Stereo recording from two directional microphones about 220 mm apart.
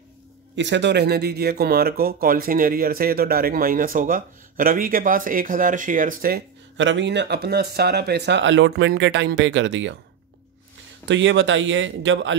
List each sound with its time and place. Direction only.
0.6 s speech: 55° right (ahead or behind)
6.8 s speech: 55° right (ahead or behind)
11.1 s speech: 55° right (ahead or behind)